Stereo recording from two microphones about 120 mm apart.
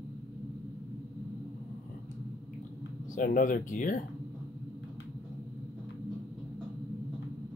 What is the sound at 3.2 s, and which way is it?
Speech, 90° left.